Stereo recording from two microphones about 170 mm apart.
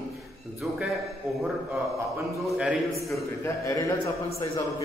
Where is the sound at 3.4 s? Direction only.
15° left (ahead or behind).